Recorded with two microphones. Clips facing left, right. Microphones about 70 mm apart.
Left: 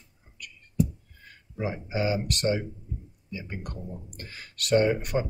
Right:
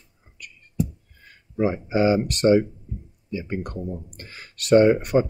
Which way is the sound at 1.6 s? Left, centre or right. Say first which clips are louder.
Right 8 dB; right.